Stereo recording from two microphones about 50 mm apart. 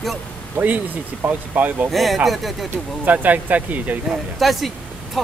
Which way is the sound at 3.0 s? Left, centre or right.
Right.